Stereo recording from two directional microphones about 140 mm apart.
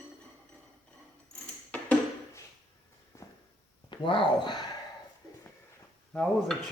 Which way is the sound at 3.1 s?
20° left (ahead or behind).